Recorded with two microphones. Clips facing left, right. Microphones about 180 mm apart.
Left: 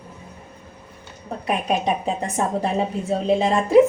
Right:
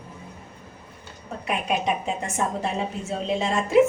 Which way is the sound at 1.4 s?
30° left (ahead or behind).